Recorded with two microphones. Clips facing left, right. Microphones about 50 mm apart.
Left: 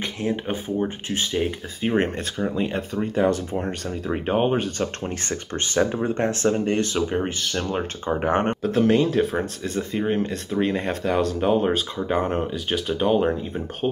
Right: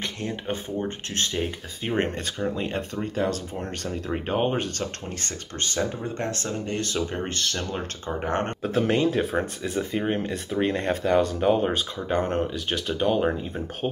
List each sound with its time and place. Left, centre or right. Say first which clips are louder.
0.0 s speech: left 5 dB; centre
3.3 s speech: left 6 dB; left
3.8 s speech: left 3 dB; centre
5.0 s speech: left 6 dB; left
8.6 s speech: left 2 dB; centre